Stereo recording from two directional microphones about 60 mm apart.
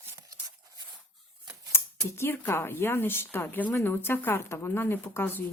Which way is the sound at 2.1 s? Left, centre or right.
Left.